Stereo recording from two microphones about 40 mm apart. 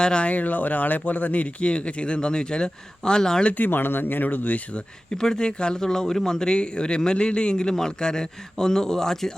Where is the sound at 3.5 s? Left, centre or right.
Left.